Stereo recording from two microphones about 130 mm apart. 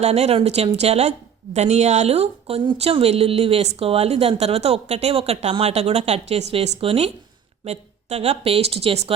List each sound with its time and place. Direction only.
0.0 s speech: 55° right (ahead or behind)